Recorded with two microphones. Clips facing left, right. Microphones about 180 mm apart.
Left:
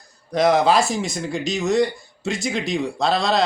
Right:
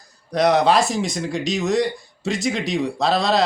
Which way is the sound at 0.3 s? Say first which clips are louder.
Even; centre (ahead or behind).